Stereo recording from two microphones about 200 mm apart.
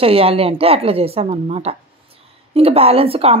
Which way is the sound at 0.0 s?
30° right (ahead or behind).